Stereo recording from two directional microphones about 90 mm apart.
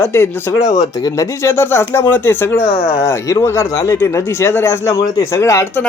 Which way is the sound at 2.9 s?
35° left (ahead or behind).